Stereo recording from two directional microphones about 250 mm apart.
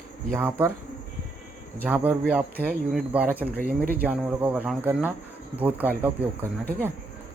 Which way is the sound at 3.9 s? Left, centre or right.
Centre.